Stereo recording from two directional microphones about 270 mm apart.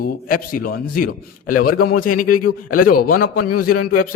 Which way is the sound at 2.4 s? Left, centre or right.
Left.